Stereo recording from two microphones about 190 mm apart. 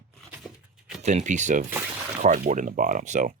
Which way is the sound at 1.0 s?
40° right (ahead or behind).